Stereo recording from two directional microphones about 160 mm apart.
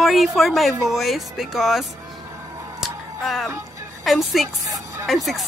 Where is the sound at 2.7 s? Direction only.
Centre (ahead or behind).